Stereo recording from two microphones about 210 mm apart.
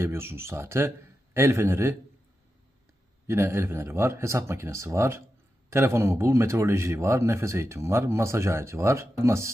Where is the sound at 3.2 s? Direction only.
10° right (ahead or behind).